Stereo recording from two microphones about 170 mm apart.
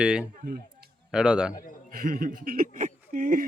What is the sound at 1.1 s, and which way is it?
Speech, 5° right (ahead or behind).